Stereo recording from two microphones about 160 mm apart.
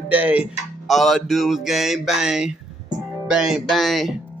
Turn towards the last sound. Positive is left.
turn(degrees=0)  # may be behind; listen again after turning